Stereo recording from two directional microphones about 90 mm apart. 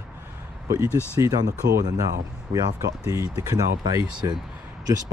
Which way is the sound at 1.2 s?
40° right (ahead or behind).